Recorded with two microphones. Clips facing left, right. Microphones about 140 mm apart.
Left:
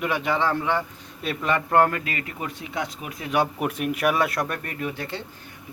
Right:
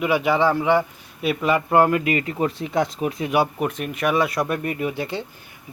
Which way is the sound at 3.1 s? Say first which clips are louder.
Right 9 dB; 25° right (ahead or behind).